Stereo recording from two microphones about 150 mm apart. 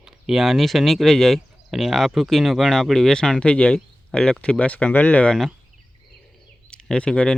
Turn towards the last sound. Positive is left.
turn(degrees=5)  # may be behind; listen again after turning